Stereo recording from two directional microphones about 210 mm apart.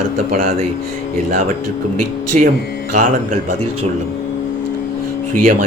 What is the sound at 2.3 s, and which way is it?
Speech, 35° right (ahead or behind).